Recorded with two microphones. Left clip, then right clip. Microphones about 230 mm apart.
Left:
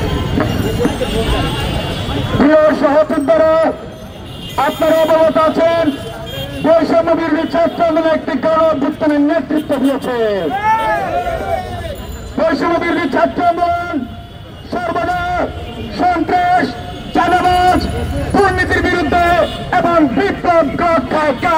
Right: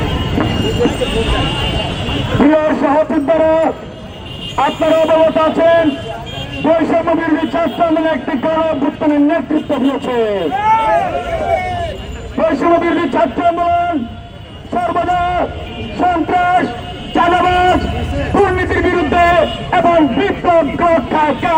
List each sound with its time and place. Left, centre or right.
0.4 s clip-clop: left
2.4 s a sound: left
4.5 s a man's voice: left
10.6 s speech: left
12.4 s a man's voice: left
14.7 s a man's voice: left